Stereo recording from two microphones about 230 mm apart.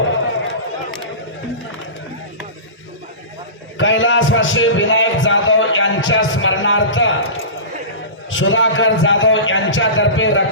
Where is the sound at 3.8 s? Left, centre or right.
Left.